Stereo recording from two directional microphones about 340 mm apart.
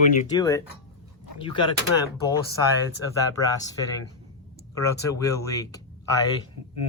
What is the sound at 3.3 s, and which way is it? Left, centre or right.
Speech, centre.